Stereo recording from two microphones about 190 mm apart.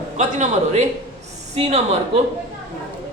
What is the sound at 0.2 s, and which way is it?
A woman's voice, 35° right (ahead or behind).